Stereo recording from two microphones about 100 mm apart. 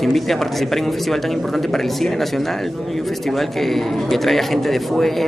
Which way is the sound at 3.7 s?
Centre (ahead or behind).